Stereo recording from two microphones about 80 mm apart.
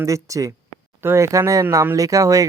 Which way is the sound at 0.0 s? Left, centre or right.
Right.